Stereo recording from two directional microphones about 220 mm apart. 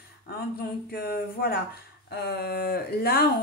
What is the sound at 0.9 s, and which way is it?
Speech, 45° left (ahead or behind).